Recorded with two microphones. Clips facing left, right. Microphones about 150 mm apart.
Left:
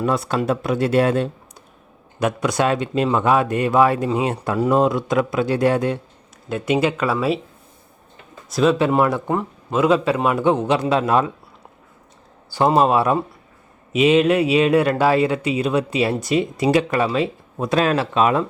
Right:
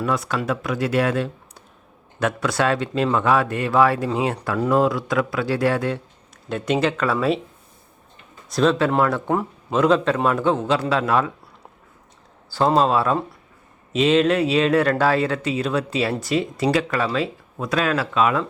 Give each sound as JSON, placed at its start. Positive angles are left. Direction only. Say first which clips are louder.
{"t": 0.0, "sound": "speech", "louder": "left 3 dB", "side_deg": 30}
{"t": 2.1, "sound": "speech", "louder": "left 2 dB", "side_deg": 15}
{"t": 8.4, "sound": "speech", "louder": "left 2 dB", "side_deg": 5}
{"t": 9.3, "sound": "speech", "louder": "even", "side_deg": -5}
{"t": 9.7, "sound": "speech", "louder": "left 1 dB", "side_deg": 5}
{"t": 12.5, "sound": "speech", "louder": "left 2 dB", "side_deg": 15}